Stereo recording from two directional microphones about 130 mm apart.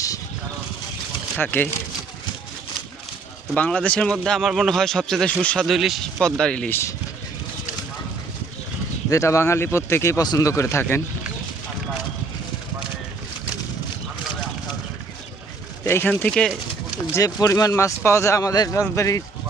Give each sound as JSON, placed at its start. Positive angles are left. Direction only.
{"t": 1.4, "sound": "speech", "side_deg": 15}
{"t": 3.5, "sound": "a man's voice", "side_deg": 10}
{"t": 6.7, "sound": "speech", "side_deg": 20}
{"t": 9.0, "sound": "speech", "side_deg": 25}
{"t": 15.8, "sound": "speech", "side_deg": 20}
{"t": 17.2, "sound": "speech", "side_deg": 25}